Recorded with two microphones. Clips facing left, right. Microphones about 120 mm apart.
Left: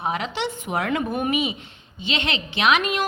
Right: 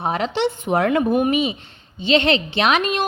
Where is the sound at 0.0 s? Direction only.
30° right (ahead or behind).